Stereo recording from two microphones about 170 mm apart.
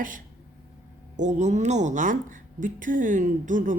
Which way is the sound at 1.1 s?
45° right (ahead or behind).